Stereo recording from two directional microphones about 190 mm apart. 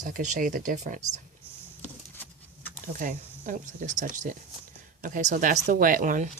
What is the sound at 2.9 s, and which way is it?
Speech, 45° right (ahead or behind).